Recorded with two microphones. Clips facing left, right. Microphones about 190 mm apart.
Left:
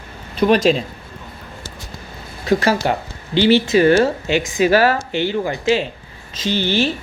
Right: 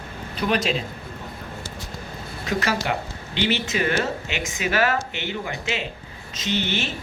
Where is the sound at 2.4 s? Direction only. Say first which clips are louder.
Left 8 dB; 35° left (ahead or behind).